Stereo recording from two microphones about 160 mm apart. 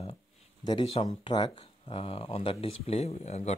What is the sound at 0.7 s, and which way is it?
Speech, 35° left (ahead or behind).